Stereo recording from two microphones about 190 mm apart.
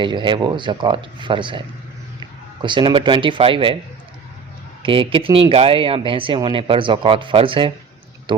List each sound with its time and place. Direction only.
0.0 s speech: 25° right (ahead or behind)
4.8 s speech: 30° right (ahead or behind)